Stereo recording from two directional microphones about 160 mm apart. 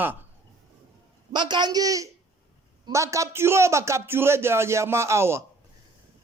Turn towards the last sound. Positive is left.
turn(degrees=-15)  # may be behind; listen again after turning